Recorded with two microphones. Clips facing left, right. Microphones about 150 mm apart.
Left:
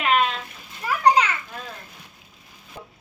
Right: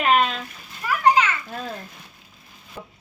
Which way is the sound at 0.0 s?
45° right (ahead or behind).